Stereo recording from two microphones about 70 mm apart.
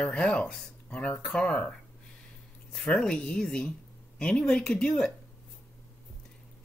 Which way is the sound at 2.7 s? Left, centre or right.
Centre.